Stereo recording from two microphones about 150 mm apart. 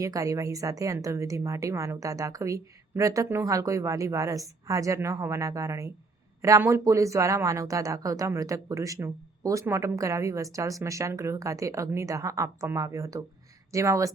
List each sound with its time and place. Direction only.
0.0 s a woman's voice: 20° right (ahead or behind)